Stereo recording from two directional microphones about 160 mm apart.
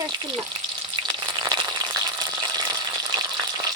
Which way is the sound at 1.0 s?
25° right (ahead or behind).